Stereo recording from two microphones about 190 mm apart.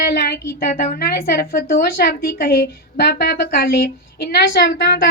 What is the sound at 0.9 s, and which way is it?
A woman's voice, 55° left (ahead or behind).